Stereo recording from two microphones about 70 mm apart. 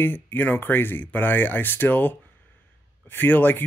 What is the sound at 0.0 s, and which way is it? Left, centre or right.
Speech, left.